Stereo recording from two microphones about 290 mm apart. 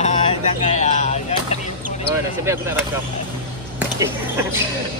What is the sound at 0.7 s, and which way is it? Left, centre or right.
Chop, left.